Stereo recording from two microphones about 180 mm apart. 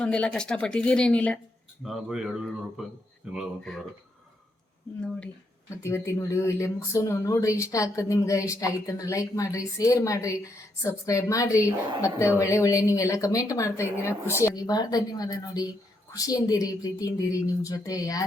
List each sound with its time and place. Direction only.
0.0 s speech: 5° left (ahead or behind)
5.7 s speech: 15° left (ahead or behind)